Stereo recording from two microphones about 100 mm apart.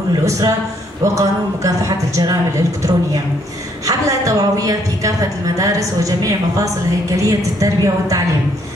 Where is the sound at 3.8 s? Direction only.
35° right (ahead or behind).